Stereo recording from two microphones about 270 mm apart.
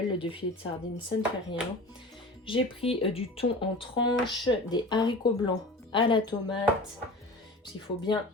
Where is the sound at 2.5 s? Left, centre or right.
Centre.